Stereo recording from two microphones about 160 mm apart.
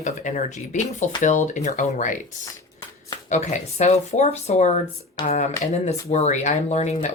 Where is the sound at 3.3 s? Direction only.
45° left (ahead or behind).